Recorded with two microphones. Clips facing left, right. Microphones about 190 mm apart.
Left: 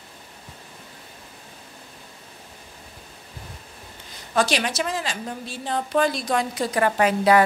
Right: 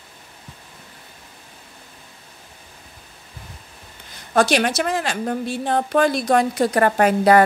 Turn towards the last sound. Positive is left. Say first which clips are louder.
# right 3 dB
turn(degrees=-50)  # may be behind; listen again after turning